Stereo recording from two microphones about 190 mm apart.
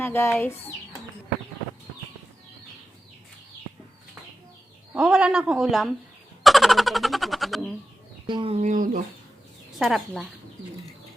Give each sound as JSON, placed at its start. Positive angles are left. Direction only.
{"t": 0.0, "sound": "speech", "side_deg": 10}
{"t": 4.9, "sound": "speech", "side_deg": -5}
{"t": 6.4, "sound": "a sound", "side_deg": 0}
{"t": 8.3, "sound": "speech", "side_deg": -30}
{"t": 9.7, "sound": "speech", "side_deg": 0}